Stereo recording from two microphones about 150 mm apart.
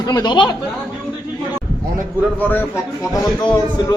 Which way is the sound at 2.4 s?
15° left (ahead or behind).